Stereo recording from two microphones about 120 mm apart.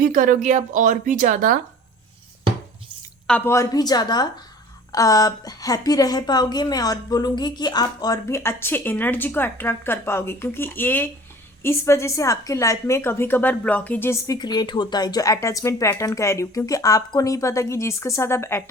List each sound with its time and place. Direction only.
0.2 s speech: 85° right
3.4 s a woman's voice: 25° left (ahead or behind)
14.3 s a woman's voice: 35° left (ahead or behind)